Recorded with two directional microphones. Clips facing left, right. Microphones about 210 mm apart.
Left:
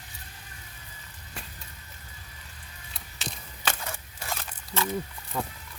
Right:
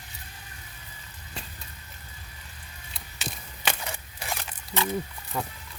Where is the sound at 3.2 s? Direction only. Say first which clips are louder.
Right 1 dB; 15° right (ahead or behind).